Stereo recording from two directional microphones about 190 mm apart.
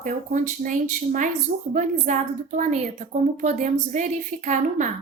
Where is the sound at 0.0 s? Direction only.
45° right (ahead or behind).